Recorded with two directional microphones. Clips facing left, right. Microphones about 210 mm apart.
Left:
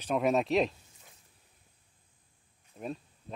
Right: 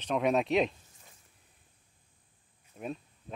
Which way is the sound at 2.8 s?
Centre (ahead or behind).